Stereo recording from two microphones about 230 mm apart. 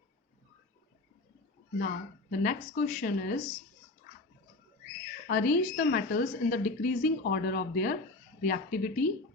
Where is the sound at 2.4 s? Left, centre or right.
Left.